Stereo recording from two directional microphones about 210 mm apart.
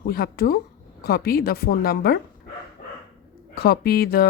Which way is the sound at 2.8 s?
40° left (ahead or behind).